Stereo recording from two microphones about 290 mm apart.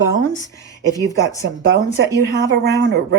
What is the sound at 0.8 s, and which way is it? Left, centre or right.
Speech, centre.